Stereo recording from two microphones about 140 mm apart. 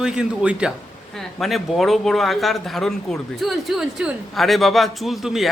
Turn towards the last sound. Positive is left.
turn(degrees=0)  # may be behind; listen again after turning